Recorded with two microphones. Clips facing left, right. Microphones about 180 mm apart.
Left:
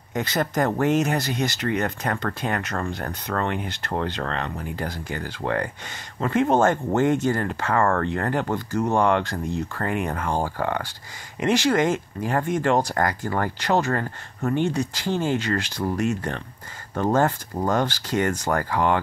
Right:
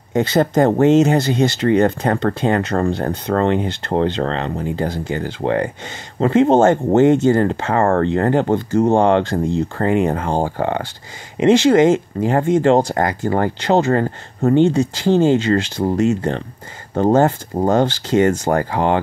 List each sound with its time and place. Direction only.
0.1 s speech: 25° right (ahead or behind)